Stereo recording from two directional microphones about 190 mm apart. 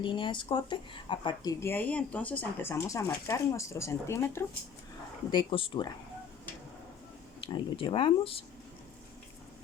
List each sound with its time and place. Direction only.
0.0 s speech: 25° left (ahead or behind)
1.6 s speech: 10° left (ahead or behind)
5.3 s speech: 25° left (ahead or behind)
7.4 s speech: 25° left (ahead or behind)